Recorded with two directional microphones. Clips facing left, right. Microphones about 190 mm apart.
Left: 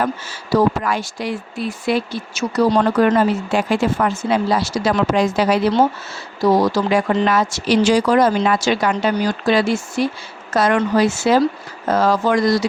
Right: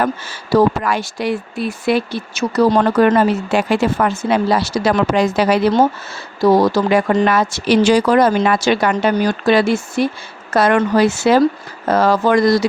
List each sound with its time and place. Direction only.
0.0 s speech: 65° right (ahead or behind)
6.6 s speech: 55° right (ahead or behind)